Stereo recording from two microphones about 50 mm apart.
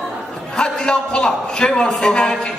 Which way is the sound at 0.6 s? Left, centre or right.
Centre.